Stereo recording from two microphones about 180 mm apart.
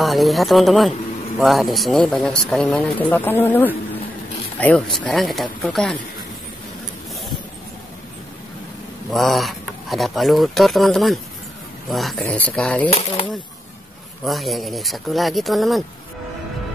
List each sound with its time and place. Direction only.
0.0 s speech: centre (ahead or behind)
9.1 s speech: centre (ahead or behind)
12.9 s speech: 30° left (ahead or behind)
14.2 s speech: centre (ahead or behind)